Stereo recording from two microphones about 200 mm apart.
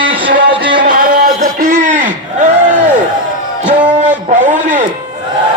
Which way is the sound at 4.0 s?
40° right (ahead or behind).